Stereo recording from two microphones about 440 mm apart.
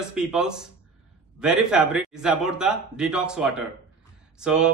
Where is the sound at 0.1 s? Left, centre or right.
Centre.